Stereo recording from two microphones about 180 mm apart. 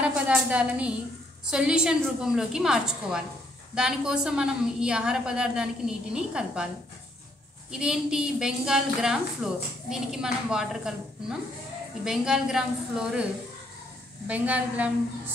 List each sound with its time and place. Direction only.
0.0 s a woman's voice: 5° right (ahead or behind)
7.7 s a woman's voice: 5° right (ahead or behind)